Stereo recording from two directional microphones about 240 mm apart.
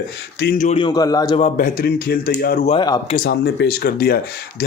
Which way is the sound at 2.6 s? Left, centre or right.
Centre.